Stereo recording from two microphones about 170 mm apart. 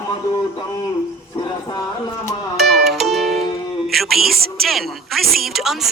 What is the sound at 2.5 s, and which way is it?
Music, centre (ahead or behind).